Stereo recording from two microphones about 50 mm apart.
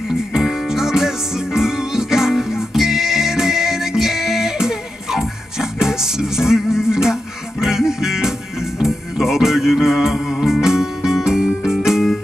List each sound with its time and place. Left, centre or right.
0.1 s music: centre